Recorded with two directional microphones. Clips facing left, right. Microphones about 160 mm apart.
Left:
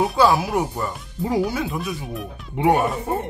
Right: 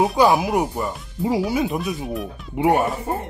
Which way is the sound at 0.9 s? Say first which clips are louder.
Left 1 dB; 5° right (ahead or behind).